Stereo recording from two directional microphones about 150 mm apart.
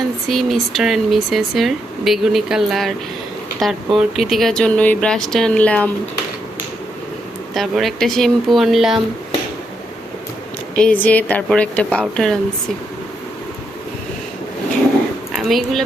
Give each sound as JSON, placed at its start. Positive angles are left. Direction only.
{"t": 0.3, "sound": "speech", "side_deg": 0}
{"t": 7.5, "sound": "speech", "side_deg": 0}
{"t": 10.8, "sound": "speech", "side_deg": 10}
{"t": 15.3, "sound": "speech", "side_deg": 0}